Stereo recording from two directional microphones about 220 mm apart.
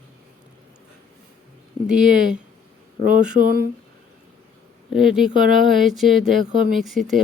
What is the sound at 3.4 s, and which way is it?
Speech, 45° right (ahead or behind).